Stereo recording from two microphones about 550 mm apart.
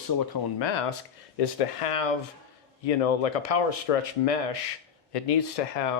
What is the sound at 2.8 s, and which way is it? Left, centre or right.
Speech, left.